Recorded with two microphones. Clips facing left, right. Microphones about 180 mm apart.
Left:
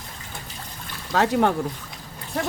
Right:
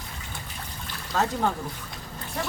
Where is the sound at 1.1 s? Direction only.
75° left (ahead or behind).